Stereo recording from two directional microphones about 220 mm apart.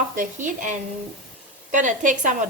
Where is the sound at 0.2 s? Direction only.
35° right (ahead or behind).